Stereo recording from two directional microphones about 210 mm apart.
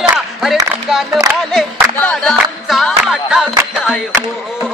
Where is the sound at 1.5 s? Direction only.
Centre (ahead or behind).